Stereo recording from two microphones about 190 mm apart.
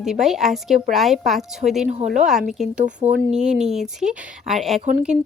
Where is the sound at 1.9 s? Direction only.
35° right (ahead or behind).